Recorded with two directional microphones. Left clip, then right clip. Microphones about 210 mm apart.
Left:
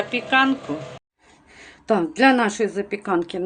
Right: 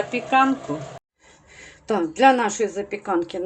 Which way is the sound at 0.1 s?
Centre (ahead or behind).